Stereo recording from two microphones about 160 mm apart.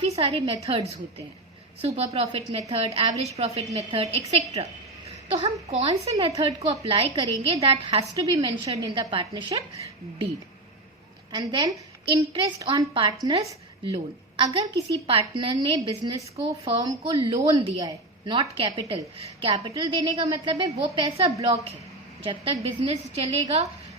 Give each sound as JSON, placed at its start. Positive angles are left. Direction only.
{"t": 0.0, "sound": "a woman's voice", "side_deg": -40}
{"t": 1.8, "sound": "a woman's voice", "side_deg": -40}
{"t": 5.0, "sound": "a sound", "side_deg": -35}
{"t": 5.6, "sound": "a woman's voice", "side_deg": -40}
{"t": 7.2, "sound": "a woman's voice", "side_deg": -25}
{"t": 7.6, "sound": "a woman's voice", "side_deg": -40}
{"t": 8.4, "sound": "a woman's voice", "side_deg": -30}
{"t": 11.3, "sound": "a woman's voice", "side_deg": -25}